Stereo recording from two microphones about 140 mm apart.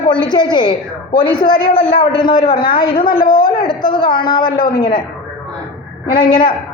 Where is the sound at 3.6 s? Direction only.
35° left (ahead or behind).